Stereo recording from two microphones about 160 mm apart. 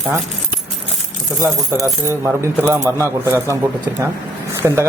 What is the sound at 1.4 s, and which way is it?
Speech, 15° right (ahead or behind).